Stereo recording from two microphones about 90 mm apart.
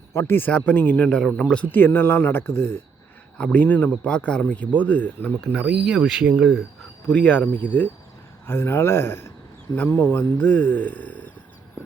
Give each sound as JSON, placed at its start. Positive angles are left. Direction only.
{"t": 0.1, "sound": "speech", "side_deg": 25}
{"t": 3.3, "sound": "speech", "side_deg": 15}
{"t": 5.5, "sound": "speech", "side_deg": -20}
{"t": 7.1, "sound": "speech", "side_deg": 15}